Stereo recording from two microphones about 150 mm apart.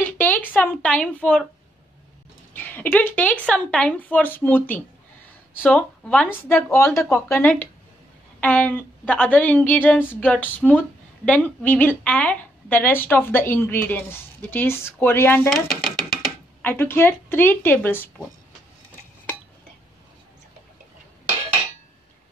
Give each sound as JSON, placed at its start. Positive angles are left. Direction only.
{"t": 0.0, "sound": "speech", "side_deg": 10}
{"t": 2.5, "sound": "a woman's voice", "side_deg": 10}
{"t": 15.5, "sound": "speech", "side_deg": -5}
{"t": 16.6, "sound": "a woman's voice", "side_deg": 15}